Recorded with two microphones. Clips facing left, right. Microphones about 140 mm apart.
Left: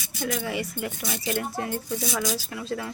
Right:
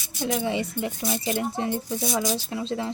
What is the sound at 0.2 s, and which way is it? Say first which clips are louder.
A woman's voice: right 3 dB; 25° right (ahead or behind).